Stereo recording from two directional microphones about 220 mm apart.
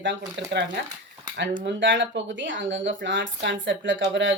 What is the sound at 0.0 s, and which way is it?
Speech, 55° right (ahead or behind).